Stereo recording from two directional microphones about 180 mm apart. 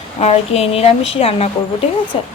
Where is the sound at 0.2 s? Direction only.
35° left (ahead or behind).